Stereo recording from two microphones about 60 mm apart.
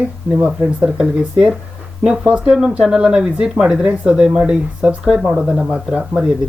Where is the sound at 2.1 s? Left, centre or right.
Centre.